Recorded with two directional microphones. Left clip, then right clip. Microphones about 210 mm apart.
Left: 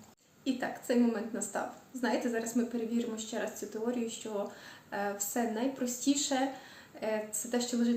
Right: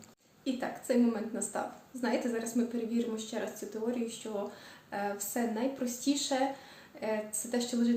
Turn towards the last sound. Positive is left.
turn(degrees=5)  # may be behind; listen again after turning